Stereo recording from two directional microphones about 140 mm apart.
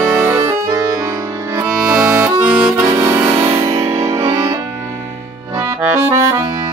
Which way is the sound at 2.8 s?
20° right (ahead or behind).